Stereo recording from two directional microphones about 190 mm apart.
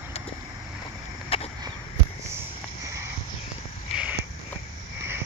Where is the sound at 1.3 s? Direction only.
30° left (ahead or behind).